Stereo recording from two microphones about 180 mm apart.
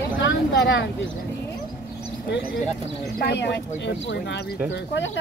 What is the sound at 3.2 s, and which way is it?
Speech, 70° left (ahead or behind).